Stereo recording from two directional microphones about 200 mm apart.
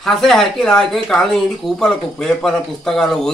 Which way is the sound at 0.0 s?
Centre (ahead or behind).